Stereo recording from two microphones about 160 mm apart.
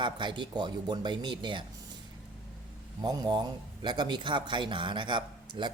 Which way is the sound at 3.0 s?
25° right (ahead or behind).